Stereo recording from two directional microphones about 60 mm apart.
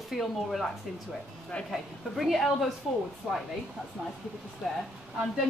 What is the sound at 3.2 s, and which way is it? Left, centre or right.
Speech, centre.